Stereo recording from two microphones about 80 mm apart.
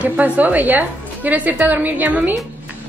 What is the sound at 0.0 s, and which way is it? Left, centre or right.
A woman's voice, centre.